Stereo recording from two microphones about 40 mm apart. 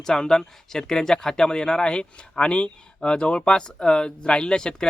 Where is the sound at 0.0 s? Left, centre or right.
Centre.